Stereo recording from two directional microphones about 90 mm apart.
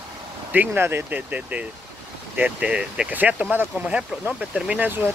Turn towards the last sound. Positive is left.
turn(degrees=-20)  # may be behind; listen again after turning